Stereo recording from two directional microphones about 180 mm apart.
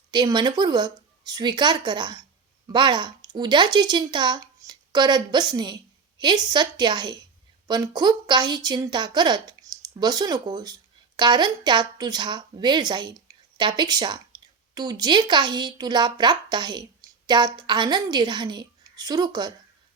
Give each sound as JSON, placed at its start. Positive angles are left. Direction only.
{"t": 0.1, "sound": "a woman's voice", "side_deg": -25}